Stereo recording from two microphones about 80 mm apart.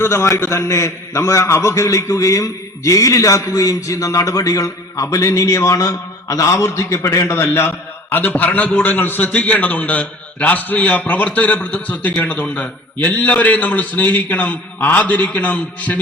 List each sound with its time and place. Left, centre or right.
0.0 s a man's voice: left